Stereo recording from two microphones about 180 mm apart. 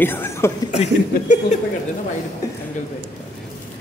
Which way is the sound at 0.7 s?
40° left (ahead or behind).